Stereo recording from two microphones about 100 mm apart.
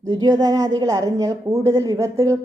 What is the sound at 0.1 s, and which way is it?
A woman's voice, 40° right (ahead or behind).